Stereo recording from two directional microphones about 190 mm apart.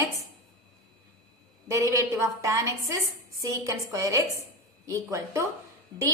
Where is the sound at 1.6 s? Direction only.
15° right (ahead or behind).